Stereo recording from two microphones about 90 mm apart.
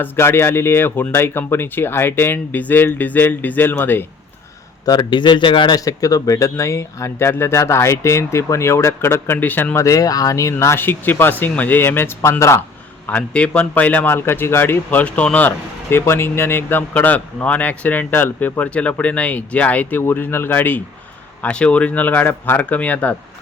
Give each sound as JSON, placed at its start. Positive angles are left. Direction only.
{"t": 0.0, "sound": "a man's voice", "side_deg": 25}
{"t": 4.9, "sound": "speech", "side_deg": 60}
{"t": 5.8, "sound": "speech", "side_deg": 40}
{"t": 9.7, "sound": "a man's voice", "side_deg": 40}
{"t": 13.1, "sound": "a man's voice", "side_deg": 15}